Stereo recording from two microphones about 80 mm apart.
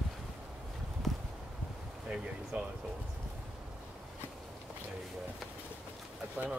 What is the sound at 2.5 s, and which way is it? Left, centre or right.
Speech, centre.